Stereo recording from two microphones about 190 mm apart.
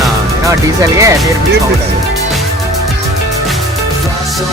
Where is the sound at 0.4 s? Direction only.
15° right (ahead or behind).